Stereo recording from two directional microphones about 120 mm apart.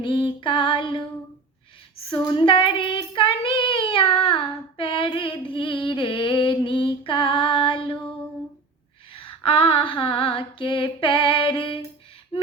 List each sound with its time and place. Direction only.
0.0 s female singing: 45° left (ahead or behind)
2.0 s child singing: 45° left (ahead or behind)
9.1 s female singing: 55° left (ahead or behind)